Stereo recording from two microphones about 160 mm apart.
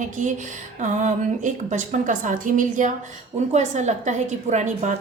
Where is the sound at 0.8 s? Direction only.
50° right (ahead or behind).